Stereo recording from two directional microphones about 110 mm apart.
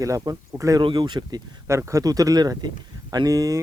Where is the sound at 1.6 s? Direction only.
25° right (ahead or behind).